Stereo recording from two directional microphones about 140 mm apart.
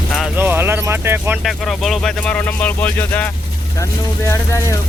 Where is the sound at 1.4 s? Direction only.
Centre (ahead or behind).